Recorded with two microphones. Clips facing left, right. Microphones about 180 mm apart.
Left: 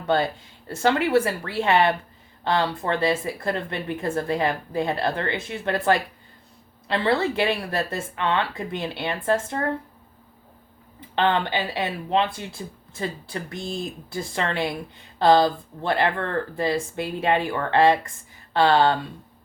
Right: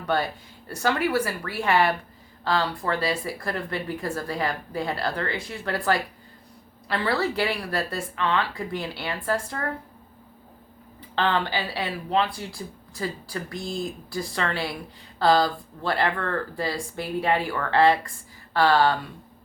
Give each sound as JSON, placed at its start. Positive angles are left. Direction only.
{"t": 0.0, "sound": "speech", "side_deg": 25}
{"t": 11.1, "sound": "speech", "side_deg": 20}